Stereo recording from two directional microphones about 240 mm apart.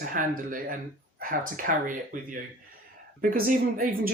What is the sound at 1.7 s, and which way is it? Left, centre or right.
Speech, right.